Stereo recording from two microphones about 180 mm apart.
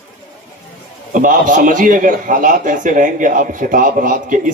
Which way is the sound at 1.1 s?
50° right (ahead or behind).